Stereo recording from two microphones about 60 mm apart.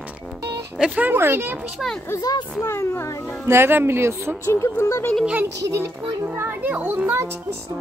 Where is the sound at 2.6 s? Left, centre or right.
Left.